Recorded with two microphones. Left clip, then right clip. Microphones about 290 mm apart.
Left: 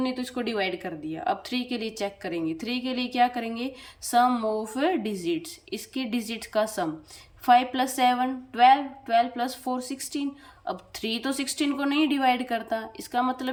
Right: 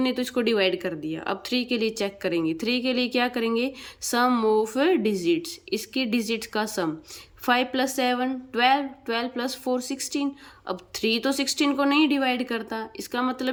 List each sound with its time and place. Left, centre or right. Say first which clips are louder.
0.0 s a woman's voice: right 5 dB; centre